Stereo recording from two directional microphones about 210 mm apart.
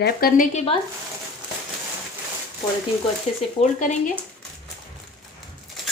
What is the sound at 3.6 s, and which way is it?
Speech, 35° left (ahead or behind).